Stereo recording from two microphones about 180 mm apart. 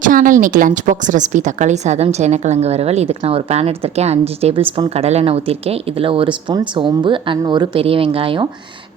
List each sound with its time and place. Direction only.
0.0 s a woman's voice: 45° right (ahead or behind); by 8.4 s 30° right (ahead or behind)